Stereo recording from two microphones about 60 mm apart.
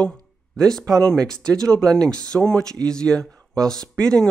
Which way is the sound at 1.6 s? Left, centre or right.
Centre.